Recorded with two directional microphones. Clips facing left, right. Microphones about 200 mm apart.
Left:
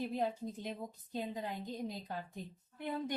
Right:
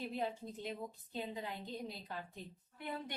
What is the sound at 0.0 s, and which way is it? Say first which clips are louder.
A woman's voice: left 4 dB; 45° left (ahead or behind).